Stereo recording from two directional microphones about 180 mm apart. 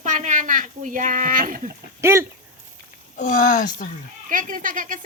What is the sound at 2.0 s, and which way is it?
Speech, 15° right (ahead or behind).